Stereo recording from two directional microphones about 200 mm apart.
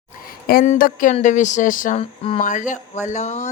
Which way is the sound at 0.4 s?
45° left (ahead or behind).